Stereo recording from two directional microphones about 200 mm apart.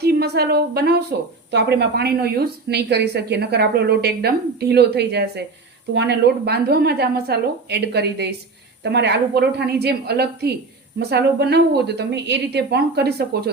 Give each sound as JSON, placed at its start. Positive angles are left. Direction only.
{"t": 0.0, "sound": "speech", "side_deg": -55}